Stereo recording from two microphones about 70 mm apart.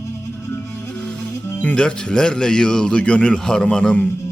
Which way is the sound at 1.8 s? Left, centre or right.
Centre.